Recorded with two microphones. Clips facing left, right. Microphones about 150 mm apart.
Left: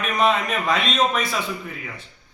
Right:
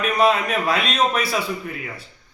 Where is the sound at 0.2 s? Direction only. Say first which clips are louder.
Right 1 dB; 5° right (ahead or behind).